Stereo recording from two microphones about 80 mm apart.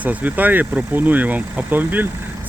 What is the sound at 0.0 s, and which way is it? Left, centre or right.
Speech, centre.